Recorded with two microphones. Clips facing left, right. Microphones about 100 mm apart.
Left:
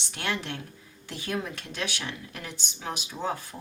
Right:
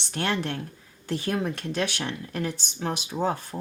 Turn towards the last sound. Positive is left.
turn(degrees=-45)  # may be behind; listen again after turning